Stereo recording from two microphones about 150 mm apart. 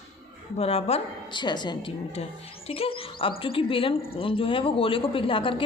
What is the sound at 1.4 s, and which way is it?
Speech, 30° left (ahead or behind).